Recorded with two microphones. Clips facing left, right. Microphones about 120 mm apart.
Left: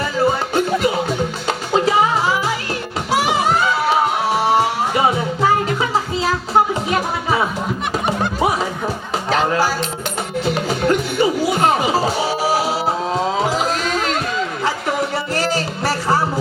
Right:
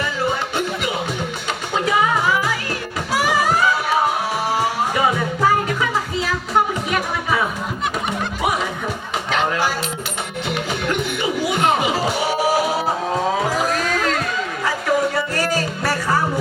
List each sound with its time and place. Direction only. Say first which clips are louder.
1.7 s music: left 3 dB; 30° left (ahead or behind)
9.3 s music: left 3 dB; 35° left (ahead or behind)
13.3 s a sound: left 1 dB; 25° left (ahead or behind)
15.1 s music: left 1 dB; 25° left (ahead or behind)